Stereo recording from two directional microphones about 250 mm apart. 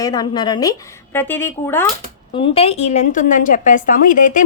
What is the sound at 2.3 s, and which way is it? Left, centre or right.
Speech, left.